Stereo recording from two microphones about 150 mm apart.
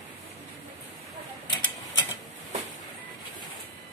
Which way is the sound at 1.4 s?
30° left (ahead or behind).